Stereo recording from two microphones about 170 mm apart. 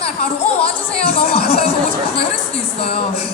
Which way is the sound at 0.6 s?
35° left (ahead or behind).